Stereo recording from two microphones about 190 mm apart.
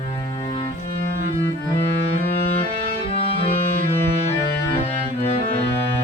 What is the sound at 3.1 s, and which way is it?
Music, 30° left (ahead or behind).